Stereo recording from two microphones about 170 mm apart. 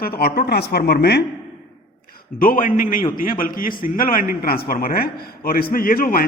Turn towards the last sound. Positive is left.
turn(degrees=55)  # may be behind; listen again after turning